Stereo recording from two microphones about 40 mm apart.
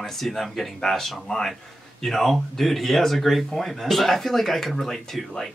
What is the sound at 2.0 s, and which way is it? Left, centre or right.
Speech, centre.